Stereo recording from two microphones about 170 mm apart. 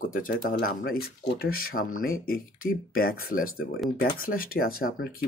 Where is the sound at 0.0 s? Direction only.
55° left (ahead or behind).